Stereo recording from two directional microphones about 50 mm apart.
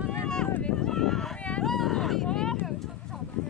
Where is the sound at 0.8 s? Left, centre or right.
Centre.